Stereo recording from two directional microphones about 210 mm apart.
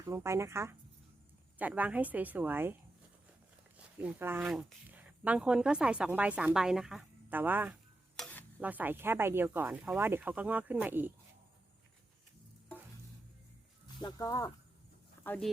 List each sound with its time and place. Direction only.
0.0 s speech: 15° right (ahead or behind)
3.9 s speech: 10° right (ahead or behind)
8.1 s stir: 5° left (ahead or behind)
8.6 s speech: 10° right (ahead or behind)
13.8 s speech: 20° left (ahead or behind)